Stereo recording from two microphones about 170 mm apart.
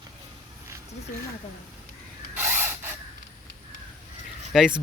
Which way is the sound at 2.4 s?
15° right (ahead or behind).